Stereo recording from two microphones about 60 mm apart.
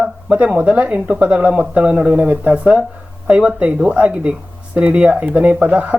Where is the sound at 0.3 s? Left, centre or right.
Right.